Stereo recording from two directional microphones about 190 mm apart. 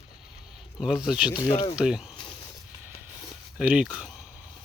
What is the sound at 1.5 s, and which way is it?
Speech, 30° left (ahead or behind).